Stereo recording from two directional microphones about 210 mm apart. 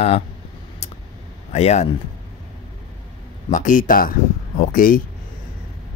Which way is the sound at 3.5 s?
35° left (ahead or behind).